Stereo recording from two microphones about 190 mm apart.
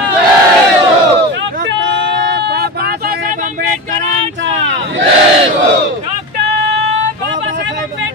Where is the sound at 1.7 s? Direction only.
65° right (ahead or behind); by 4.3 s 40° right (ahead or behind).